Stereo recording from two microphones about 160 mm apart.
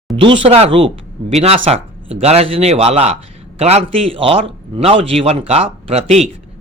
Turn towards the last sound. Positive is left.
turn(degrees=-40)  # may be behind; listen again after turning